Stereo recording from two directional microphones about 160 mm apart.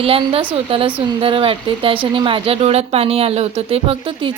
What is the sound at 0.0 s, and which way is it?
Speech, 35° right (ahead or behind).